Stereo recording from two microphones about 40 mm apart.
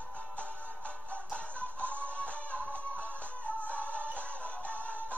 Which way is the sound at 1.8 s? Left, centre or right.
Left.